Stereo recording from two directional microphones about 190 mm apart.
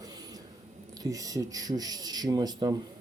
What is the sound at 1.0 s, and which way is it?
Speech, 20° right (ahead or behind).